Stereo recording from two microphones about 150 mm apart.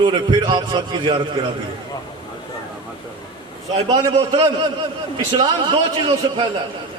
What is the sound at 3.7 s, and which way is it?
A man's voice, 40° right (ahead or behind).